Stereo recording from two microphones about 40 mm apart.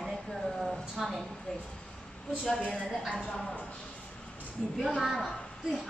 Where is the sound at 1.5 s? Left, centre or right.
Left.